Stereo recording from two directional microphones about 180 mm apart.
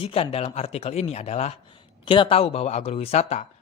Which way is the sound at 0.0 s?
30° left (ahead or behind).